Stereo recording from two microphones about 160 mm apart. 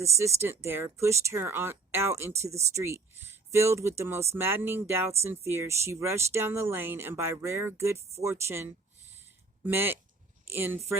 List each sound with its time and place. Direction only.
0.3 s speech: 15° right (ahead or behind)